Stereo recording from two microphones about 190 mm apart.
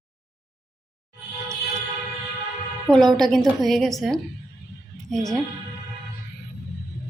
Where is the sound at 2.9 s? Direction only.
Centre (ahead or behind).